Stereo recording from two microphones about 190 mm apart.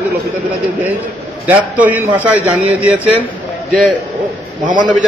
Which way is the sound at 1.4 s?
10° right (ahead or behind).